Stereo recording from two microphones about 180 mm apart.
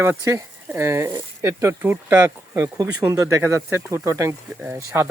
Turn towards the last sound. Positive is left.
turn(degrees=-15)  # may be behind; listen again after turning